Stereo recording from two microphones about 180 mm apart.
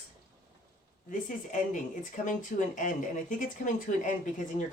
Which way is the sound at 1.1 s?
45° left (ahead or behind).